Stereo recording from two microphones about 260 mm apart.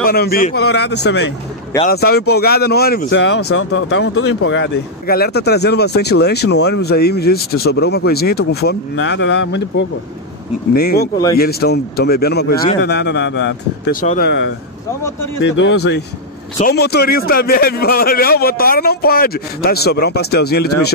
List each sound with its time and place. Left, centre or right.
0.0 s speech: left
14.0 s speech: left
15.4 s speech: left